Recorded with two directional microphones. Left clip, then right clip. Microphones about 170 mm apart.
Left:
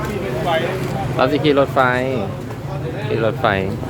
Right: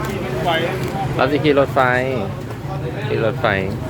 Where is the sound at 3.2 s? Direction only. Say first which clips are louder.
Left 1 dB; 15° left (ahead or behind).